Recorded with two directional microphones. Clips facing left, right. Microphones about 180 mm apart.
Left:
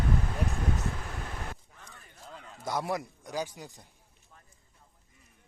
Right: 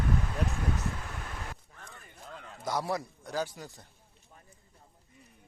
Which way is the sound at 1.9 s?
Centre (ahead or behind).